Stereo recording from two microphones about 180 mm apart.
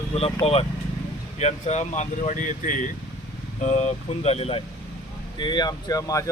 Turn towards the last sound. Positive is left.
turn(degrees=20)  # may be behind; listen again after turning